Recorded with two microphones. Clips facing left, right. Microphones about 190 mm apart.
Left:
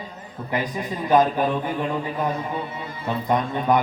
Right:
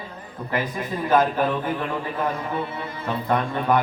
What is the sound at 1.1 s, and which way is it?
A man's voice, 15° left (ahead or behind).